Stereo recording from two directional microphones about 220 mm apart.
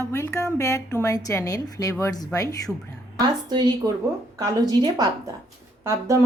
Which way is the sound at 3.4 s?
20° right (ahead or behind).